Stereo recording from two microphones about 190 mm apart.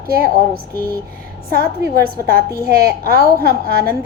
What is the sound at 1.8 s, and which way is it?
A woman's voice, 55° right (ahead or behind).